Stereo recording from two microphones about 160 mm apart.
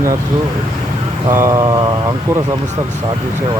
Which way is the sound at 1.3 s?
15° right (ahead or behind).